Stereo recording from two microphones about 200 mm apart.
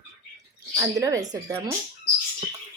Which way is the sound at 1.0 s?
15° right (ahead or behind).